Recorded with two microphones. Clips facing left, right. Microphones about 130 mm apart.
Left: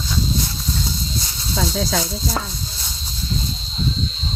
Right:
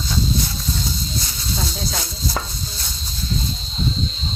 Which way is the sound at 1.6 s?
90° left.